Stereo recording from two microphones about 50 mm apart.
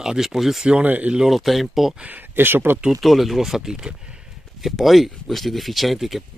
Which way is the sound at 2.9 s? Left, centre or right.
Centre.